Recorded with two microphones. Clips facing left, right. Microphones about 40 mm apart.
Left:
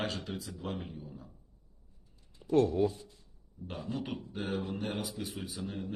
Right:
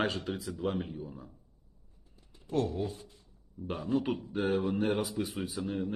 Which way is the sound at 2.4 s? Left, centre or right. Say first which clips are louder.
Left 6 dB; left.